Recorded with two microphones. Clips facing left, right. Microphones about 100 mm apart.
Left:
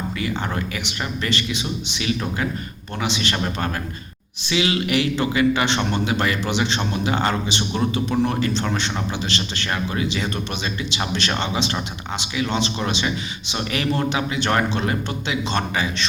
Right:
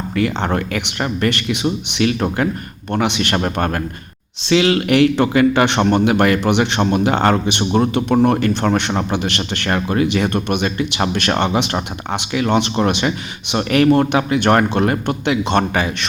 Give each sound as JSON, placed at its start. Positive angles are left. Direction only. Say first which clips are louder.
{"t": 0.2, "sound": "speech", "louder": "right 9 dB", "side_deg": -60}
{"t": 7.7, "sound": "speech", "louder": "right 8 dB", "side_deg": -50}